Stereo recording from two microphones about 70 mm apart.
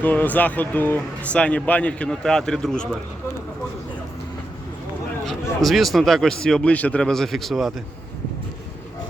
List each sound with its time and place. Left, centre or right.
0.0 s speech: left; by 3.0 s centre
5.2 s speech: centre
7.1 s speech: centre